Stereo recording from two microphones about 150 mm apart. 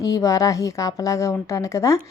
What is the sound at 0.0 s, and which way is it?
A woman's voice, 20° left (ahead or behind).